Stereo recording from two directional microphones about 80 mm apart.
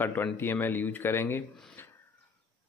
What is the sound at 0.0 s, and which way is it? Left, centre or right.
Speech, left.